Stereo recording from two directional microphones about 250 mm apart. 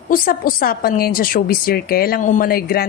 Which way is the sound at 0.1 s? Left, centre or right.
Left.